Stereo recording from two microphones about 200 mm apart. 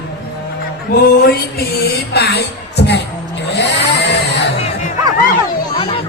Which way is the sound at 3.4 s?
55° left (ahead or behind).